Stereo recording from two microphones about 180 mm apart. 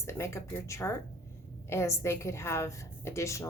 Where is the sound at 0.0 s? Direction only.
15° left (ahead or behind).